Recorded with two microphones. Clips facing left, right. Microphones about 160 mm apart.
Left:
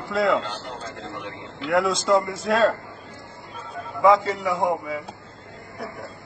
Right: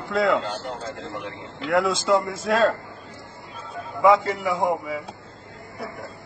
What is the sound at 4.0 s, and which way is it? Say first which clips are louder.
Speech: even; centre (ahead or behind).